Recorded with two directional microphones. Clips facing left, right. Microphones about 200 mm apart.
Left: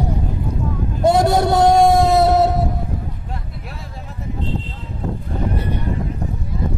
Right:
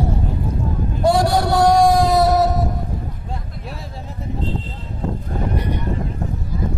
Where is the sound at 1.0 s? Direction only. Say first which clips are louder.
Left 2 dB; 20° left (ahead or behind).